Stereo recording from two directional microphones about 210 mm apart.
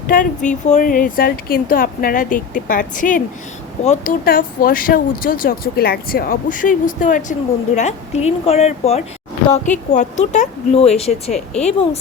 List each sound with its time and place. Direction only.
0.1 s speech: 40° left (ahead or behind)
11.3 s speech: centre (ahead or behind)